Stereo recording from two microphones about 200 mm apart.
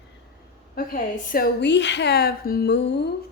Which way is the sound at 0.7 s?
45° left (ahead or behind).